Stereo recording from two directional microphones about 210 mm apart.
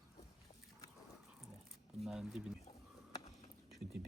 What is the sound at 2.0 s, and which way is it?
Speech, centre (ahead or behind).